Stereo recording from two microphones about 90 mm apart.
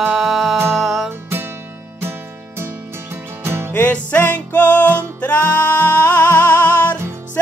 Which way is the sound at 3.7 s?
15° left (ahead or behind).